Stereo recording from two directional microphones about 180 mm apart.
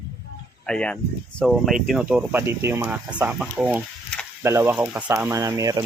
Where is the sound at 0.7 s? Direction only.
5° left (ahead or behind).